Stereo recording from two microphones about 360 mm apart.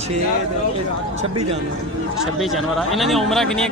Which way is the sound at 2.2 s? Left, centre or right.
Centre.